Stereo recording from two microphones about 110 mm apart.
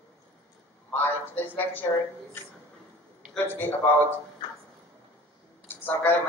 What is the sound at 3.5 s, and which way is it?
Speech, 20° left (ahead or behind).